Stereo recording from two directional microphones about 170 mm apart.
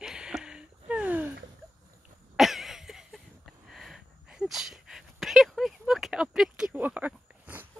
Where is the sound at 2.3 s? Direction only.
Centre (ahead or behind).